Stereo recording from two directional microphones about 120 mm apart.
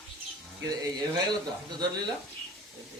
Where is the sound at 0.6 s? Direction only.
30° right (ahead or behind).